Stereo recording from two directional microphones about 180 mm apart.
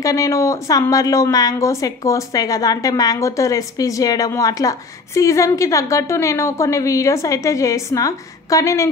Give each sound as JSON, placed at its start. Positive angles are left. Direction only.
{"t": 0.0, "sound": "a woman's voice", "side_deg": 20}